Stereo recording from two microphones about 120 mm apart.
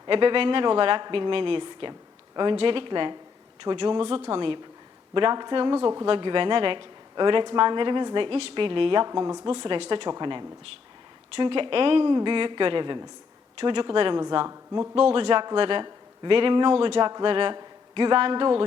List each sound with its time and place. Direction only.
0.1 s speech: 45° right (ahead or behind)
9.0 s speech: 30° right (ahead or behind)
9.5 s speech: 50° right (ahead or behind)
14.4 s speech: 25° right (ahead or behind)
14.9 s speech: 50° right (ahead or behind)